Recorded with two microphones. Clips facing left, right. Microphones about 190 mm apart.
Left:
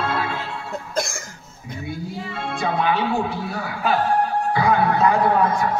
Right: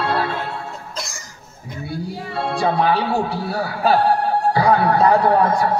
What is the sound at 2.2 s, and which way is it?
Speech, 40° right (ahead or behind).